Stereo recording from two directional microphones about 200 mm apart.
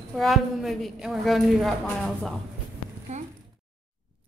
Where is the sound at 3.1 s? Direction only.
35° right (ahead or behind).